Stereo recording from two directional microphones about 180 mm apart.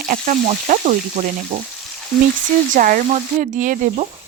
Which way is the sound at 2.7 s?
50° right (ahead or behind).